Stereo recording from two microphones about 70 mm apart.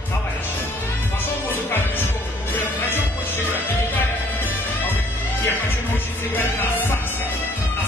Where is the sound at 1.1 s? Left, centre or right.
Left.